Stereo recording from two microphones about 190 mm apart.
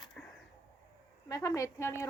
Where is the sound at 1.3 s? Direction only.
15° left (ahead or behind).